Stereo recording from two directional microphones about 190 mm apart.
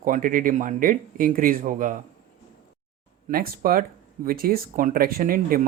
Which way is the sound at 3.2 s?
50° right (ahead or behind).